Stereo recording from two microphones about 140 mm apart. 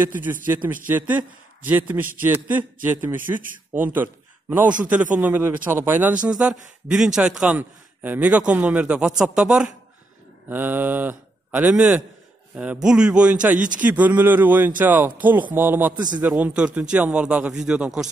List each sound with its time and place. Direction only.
0.5 s a man's voice: 10° right (ahead or behind)
15.9 s a man's voice: 70° right (ahead or behind)
16.2 s a man's voice: 10° right (ahead or behind)